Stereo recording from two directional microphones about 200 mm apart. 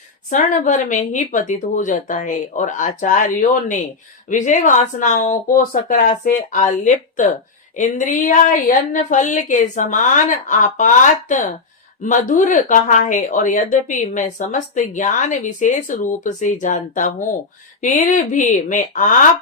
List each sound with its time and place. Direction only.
0.3 s speech: 40° left (ahead or behind)